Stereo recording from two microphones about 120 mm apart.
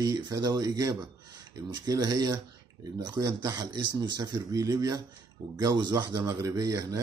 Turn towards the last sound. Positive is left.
turn(degrees=-30)  # may be behind; listen again after turning